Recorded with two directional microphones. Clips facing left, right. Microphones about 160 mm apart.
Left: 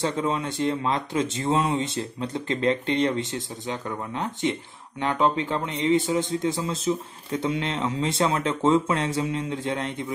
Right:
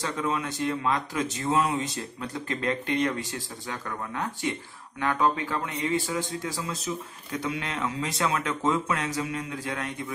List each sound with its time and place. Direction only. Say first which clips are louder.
0.0 s a man's voice: left 4 dB; 25° left (ahead or behind)